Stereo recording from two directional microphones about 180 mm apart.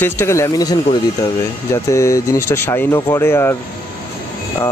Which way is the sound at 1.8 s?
15° left (ahead or behind).